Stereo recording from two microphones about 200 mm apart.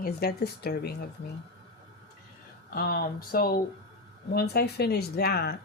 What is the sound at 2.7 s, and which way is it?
A woman's voice, 50° left (ahead or behind).